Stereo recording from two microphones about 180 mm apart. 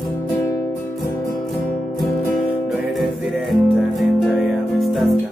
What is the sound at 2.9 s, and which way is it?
Music, centre (ahead or behind).